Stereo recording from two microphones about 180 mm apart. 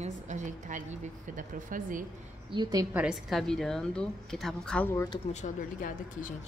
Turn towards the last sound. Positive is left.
turn(degrees=45)  # may be behind; listen again after turning